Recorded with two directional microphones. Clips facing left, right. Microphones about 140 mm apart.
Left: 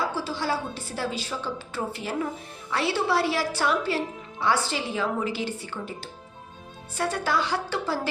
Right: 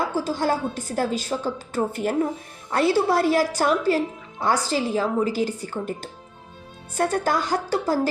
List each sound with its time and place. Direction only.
0.1 s a woman's voice: 45° right (ahead or behind)